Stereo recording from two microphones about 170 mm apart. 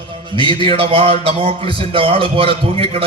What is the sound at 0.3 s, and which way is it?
A man's voice, 30° right (ahead or behind).